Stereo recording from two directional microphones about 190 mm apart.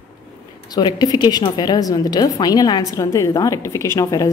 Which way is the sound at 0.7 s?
20° left (ahead or behind).